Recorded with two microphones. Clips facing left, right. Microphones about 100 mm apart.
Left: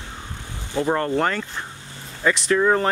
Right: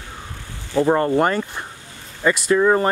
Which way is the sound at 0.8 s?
20° right (ahead or behind).